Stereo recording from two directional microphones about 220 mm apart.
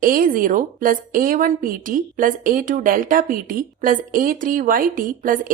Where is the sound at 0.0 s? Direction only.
40° right (ahead or behind).